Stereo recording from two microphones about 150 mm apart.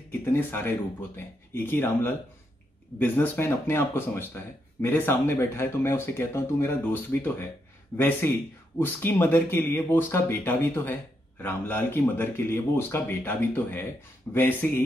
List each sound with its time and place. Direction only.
0.2 s speech: 15° left (ahead or behind)